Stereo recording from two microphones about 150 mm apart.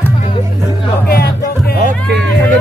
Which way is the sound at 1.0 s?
90° left.